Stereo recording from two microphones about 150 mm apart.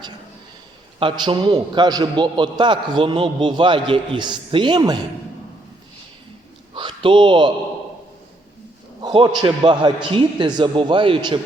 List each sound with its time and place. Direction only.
0.9 s a man's voice: 30° right (ahead or behind)
6.7 s a sound: 35° right (ahead or behind)
9.0 s a man's voice: 30° right (ahead or behind)